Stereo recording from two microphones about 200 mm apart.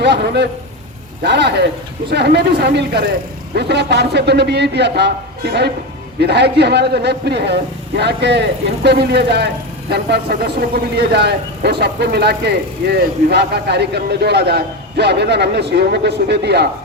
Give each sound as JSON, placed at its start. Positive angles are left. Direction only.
{"t": 0.0, "sound": "a man's voice", "side_deg": -60}